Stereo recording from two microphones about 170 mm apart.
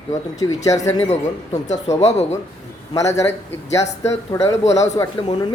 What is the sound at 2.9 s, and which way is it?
Speech, 20° left (ahead or behind).